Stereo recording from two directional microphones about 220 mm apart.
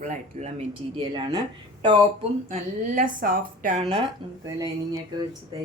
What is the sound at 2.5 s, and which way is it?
Speech, 35° right (ahead or behind).